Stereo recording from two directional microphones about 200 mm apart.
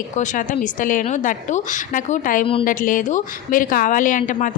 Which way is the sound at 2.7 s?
40° left (ahead or behind).